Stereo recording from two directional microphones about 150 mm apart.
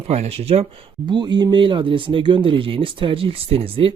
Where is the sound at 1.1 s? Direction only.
30° right (ahead or behind).